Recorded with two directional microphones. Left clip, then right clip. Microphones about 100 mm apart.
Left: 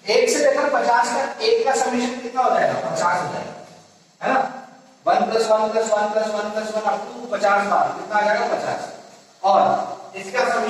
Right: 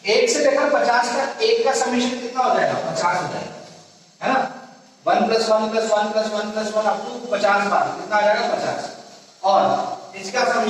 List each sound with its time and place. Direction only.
0.1 s a man's voice: 30° left (ahead or behind)
4.2 s dog: 25° left (ahead or behind)
5.0 s a man's voice: 25° left (ahead or behind)